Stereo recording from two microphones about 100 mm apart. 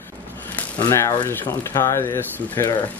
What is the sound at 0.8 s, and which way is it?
Speech, 25° left (ahead or behind).